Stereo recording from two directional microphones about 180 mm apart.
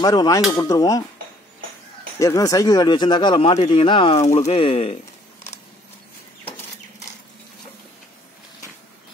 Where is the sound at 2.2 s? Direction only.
20° left (ahead or behind).